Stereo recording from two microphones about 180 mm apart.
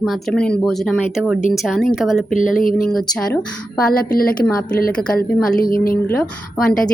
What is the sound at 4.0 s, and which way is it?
Speech, 55° left (ahead or behind).